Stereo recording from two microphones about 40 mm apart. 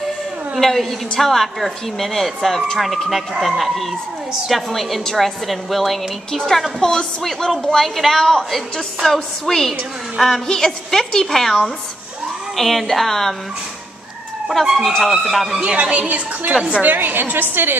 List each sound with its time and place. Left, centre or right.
0.6 s a woman's voice: centre
6.8 s a woman's voice: centre
14.8 s a woman's voice: centre
15.6 s a woman's voice: right
16.8 s a woman's voice: right